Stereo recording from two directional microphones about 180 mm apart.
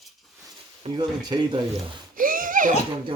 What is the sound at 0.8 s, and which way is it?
Speech, 25° right (ahead or behind).